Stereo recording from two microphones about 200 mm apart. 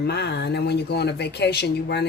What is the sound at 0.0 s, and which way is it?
Speech, 55° left (ahead or behind).